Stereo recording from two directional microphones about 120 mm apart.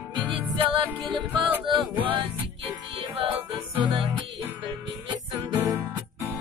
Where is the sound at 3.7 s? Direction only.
45° right (ahead or behind).